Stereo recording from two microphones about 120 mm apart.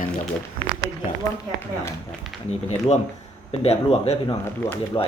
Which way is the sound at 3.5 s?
60° left (ahead or behind).